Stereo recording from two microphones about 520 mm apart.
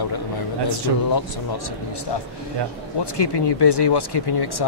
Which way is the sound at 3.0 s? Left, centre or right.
Left.